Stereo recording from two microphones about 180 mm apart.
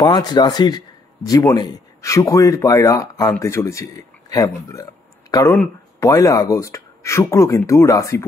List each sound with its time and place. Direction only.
0.0 s speech: 25° left (ahead or behind)